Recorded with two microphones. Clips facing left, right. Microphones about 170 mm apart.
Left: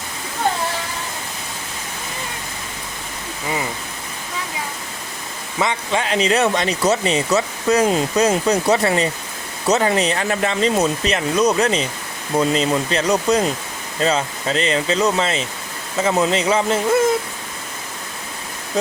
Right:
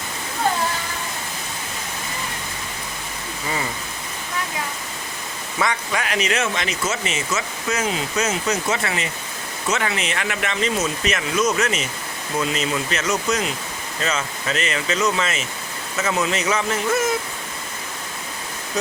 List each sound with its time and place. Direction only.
5.5 s speech: 25° left (ahead or behind)